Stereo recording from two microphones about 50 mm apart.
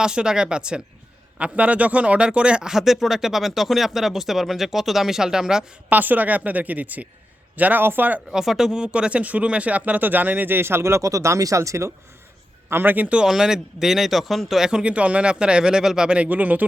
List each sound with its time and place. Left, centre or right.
0.0 s speech: centre
5.9 s speech: right
8.3 s speech: centre; by 11.9 s right
12.8 s speech: right
13.2 s speech: centre; by 16.6 s right